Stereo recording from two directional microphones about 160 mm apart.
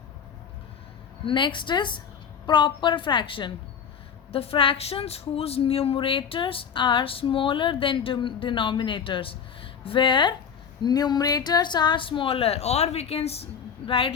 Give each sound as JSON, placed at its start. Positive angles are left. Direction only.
{"t": 1.2, "sound": "a woman's voice", "side_deg": 30}